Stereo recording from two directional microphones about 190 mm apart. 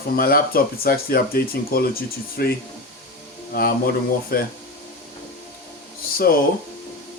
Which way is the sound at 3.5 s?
50° left (ahead or behind).